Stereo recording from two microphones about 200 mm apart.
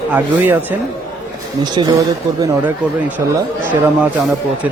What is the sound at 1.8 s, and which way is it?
Speech, 25° right (ahead or behind).